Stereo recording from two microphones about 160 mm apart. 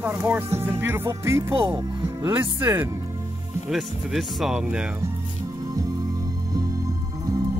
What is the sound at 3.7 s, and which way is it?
Speech, centre (ahead or behind).